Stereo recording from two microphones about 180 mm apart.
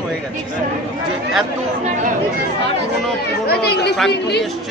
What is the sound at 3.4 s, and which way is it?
Speech, 60° left (ahead or behind).